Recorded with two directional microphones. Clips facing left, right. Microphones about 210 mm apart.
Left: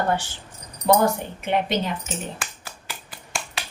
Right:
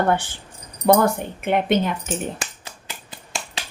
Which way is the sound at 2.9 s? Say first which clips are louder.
Even; 20° right (ahead or behind).